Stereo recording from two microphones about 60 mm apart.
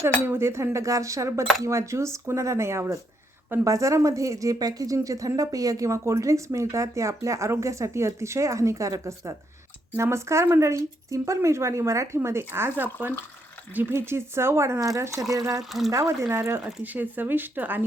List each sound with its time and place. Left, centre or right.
0.3 s speech: right
3.6 s speech: right
5.0 s speech: right
5.4 s speech: right
14.8 s speech: right
15.9 s speech: right
16.3 s speech: right
16.8 s speech: right